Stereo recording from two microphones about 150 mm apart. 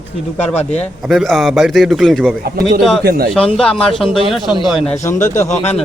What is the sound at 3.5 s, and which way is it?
A man's voice, 5° left (ahead or behind).